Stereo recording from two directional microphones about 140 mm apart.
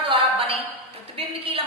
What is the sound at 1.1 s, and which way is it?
Speech, 45° right (ahead or behind).